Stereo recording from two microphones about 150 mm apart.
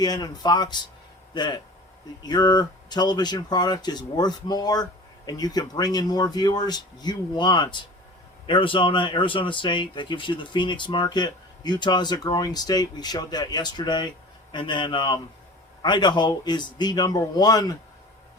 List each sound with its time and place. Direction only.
0.0 s speech: 25° left (ahead or behind)